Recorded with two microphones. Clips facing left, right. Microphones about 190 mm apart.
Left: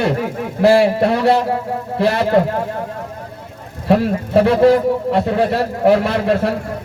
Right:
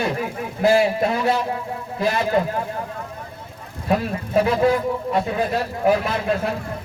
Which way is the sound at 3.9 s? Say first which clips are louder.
Left 7 dB; 70° left (ahead or behind).